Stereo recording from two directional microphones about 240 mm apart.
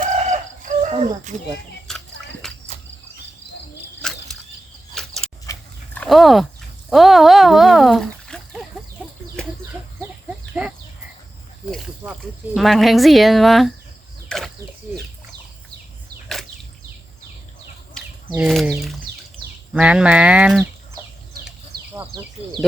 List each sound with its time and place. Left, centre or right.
0.0 s chicken: right
1.9 s a sound: centre
2.4 s cricket: centre
4.0 s a sound: centre
5.5 s dog: centre
6.9 s speech: centre
10.6 s livestock: centre
12.5 s speech: centre
14.3 s a sound: centre
18.3 s speech: centre
21.9 s speech: centre